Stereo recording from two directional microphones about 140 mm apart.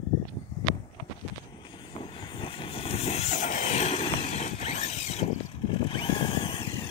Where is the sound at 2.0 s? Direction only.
40° left (ahead or behind).